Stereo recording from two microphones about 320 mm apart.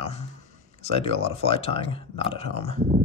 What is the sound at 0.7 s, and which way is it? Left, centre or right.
Speech, centre.